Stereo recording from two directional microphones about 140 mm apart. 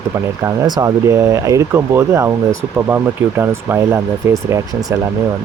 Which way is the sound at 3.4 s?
20° right (ahead or behind).